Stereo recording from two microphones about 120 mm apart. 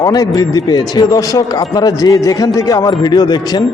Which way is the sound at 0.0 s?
30° left (ahead or behind).